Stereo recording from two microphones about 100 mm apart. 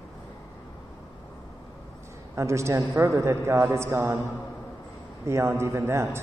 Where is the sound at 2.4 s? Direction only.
30° right (ahead or behind).